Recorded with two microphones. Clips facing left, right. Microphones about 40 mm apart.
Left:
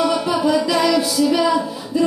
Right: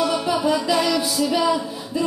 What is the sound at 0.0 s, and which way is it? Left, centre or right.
Music, centre.